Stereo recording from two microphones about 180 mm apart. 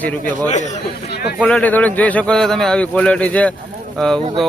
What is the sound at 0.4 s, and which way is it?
Speech, 40° left (ahead or behind).